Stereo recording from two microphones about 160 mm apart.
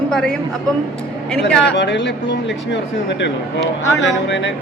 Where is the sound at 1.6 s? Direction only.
90° left.